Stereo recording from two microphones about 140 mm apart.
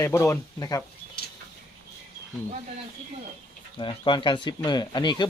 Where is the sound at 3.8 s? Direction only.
35° left (ahead or behind).